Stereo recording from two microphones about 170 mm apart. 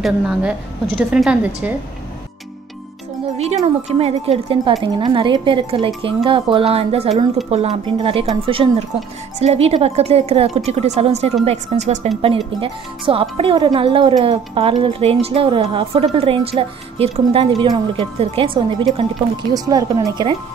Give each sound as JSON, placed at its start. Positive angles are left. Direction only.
{"t": 0.0, "sound": "a woman's voice", "side_deg": -5}
{"t": 3.3, "sound": "a woman's voice", "side_deg": -40}
{"t": 12.5, "sound": "speech", "side_deg": -30}